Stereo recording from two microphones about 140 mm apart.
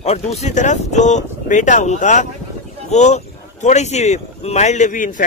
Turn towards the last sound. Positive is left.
turn(degrees=70)  # may be behind; listen again after turning